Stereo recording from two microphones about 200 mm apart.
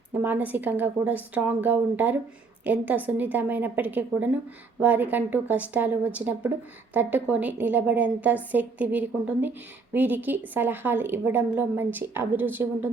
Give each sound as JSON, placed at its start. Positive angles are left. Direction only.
{"t": 0.1, "sound": "a woman's voice", "side_deg": -10}